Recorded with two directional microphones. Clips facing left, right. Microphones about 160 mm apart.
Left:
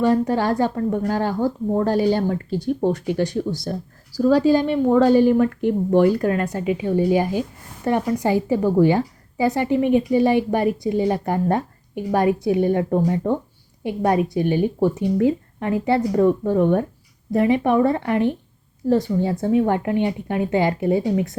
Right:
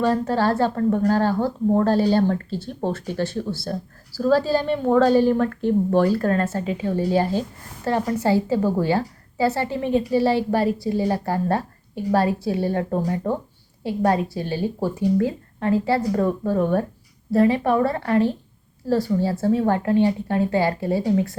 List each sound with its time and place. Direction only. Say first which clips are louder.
0.0 s speech: left 2 dB; 15° left (ahead or behind)